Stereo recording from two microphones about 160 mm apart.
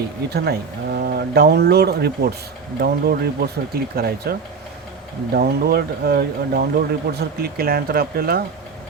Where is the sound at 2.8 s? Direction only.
75° right (ahead or behind).